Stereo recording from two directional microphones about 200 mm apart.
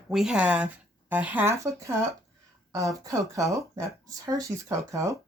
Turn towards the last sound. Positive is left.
turn(degrees=-15)  # may be behind; listen again after turning